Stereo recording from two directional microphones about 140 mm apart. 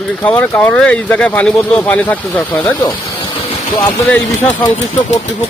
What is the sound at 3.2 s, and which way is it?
Vehicle, 35° left (ahead or behind).